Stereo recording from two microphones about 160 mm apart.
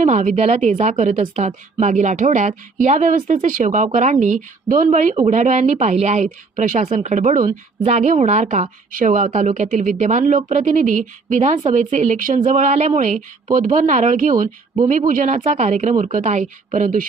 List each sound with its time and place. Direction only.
0.0 s speech: 50° right (ahead or behind)